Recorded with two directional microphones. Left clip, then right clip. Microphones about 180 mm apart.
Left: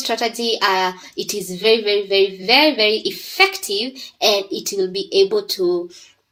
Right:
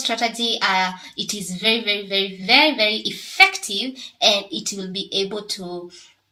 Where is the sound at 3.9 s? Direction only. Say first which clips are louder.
Even; 35° left (ahead or behind).